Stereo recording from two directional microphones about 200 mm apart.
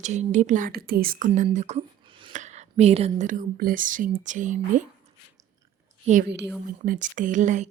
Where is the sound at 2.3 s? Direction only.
35° right (ahead or behind).